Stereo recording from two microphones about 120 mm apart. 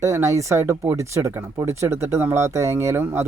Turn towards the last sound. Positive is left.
turn(degrees=-20)  # may be behind; listen again after turning